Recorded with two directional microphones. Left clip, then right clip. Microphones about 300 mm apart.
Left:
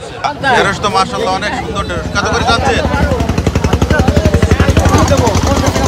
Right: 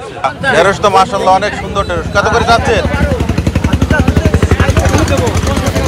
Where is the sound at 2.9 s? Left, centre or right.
Left.